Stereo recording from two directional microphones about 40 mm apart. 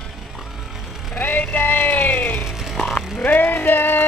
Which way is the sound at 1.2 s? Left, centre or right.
Left.